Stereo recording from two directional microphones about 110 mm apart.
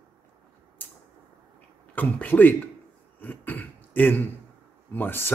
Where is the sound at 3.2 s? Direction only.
15° left (ahead or behind).